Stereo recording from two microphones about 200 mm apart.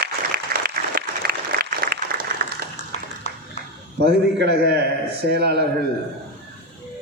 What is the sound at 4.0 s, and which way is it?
A man's voice, 55° right (ahead or behind).